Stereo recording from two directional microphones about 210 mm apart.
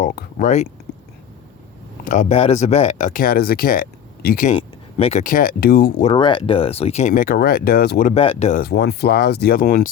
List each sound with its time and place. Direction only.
0.0 s speech: 45° left (ahead or behind)
2.0 s speech: 35° left (ahead or behind)
4.5 s a sound: 30° left (ahead or behind)
5.2 s speech: 40° left (ahead or behind)
6.1 s speech: 25° left (ahead or behind); by 8.1 s 45° left (ahead or behind)
8.1 s speech: 30° left (ahead or behind)